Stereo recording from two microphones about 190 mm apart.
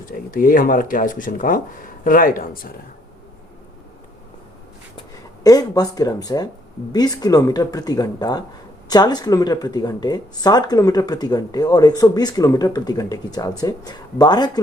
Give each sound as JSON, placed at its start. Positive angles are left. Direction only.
{"t": 0.0, "sound": "speech", "side_deg": 45}
{"t": 5.4, "sound": "speech", "side_deg": 20}